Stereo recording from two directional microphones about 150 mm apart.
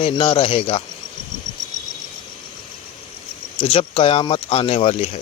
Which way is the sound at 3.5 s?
35° left (ahead or behind).